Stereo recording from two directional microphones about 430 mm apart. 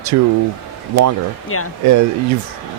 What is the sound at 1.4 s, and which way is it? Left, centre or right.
Speech, left.